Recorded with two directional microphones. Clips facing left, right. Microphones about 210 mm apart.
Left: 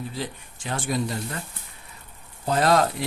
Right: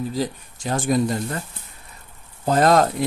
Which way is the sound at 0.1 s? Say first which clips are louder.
Right 8 dB; 40° right (ahead or behind).